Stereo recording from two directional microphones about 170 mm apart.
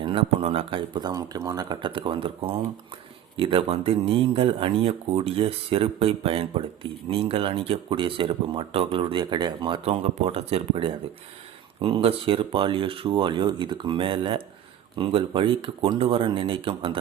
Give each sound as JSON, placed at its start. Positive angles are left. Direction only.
{"t": 0.0, "sound": "speech", "side_deg": -30}